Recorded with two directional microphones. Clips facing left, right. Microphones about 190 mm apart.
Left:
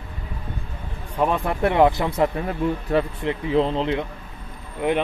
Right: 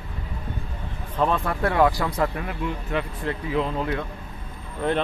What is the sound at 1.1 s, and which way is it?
Speech, 15° left (ahead or behind).